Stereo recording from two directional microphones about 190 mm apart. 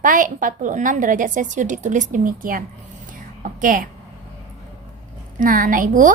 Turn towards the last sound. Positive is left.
turn(degrees=-45)  # may be behind; listen again after turning